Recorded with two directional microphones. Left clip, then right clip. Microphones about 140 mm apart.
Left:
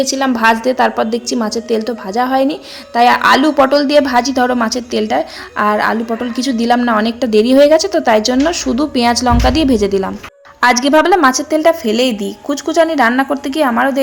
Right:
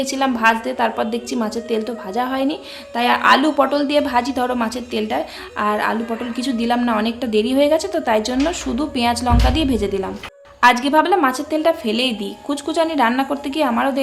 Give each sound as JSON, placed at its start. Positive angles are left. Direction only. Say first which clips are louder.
{"t": 0.0, "sound": "a woman's voice", "louder": "left 5 dB", "side_deg": 30}
{"t": 0.3, "sound": "a woman's voice", "louder": "left 6 dB", "side_deg": 50}